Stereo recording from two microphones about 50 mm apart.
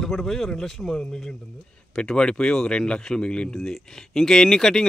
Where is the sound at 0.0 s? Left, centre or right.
Centre.